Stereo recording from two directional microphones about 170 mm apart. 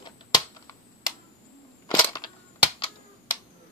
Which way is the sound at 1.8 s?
20° left (ahead or behind).